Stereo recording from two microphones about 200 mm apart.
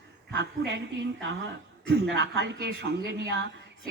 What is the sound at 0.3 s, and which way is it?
Speech, 60° right (ahead or behind).